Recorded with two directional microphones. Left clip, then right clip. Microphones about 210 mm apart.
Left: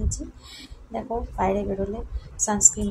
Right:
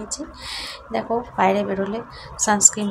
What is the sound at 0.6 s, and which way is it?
Speech, 15° right (ahead or behind).